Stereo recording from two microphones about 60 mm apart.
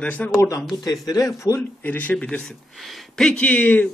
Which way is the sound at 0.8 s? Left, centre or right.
Left.